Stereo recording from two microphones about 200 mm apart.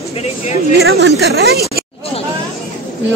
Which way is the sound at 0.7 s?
55° right (ahead or behind).